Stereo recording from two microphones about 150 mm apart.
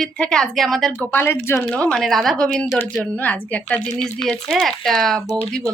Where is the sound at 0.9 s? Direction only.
15° left (ahead or behind).